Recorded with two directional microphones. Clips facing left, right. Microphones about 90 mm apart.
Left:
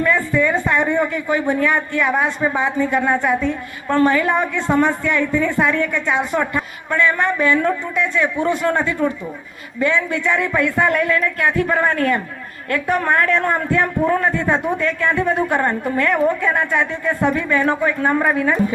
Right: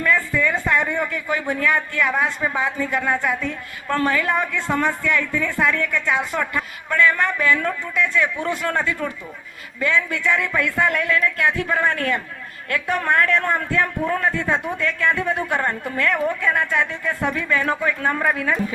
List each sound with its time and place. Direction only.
0.0 s speech: 20° left (ahead or behind)
10.8 s a woman's voice: 35° left (ahead or behind)